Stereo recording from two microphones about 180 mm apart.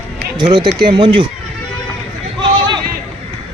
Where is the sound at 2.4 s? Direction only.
25° right (ahead or behind).